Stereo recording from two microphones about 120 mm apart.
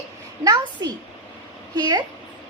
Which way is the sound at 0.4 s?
35° right (ahead or behind).